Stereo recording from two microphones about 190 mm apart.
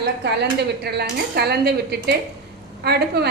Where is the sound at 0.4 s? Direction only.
60° right (ahead or behind).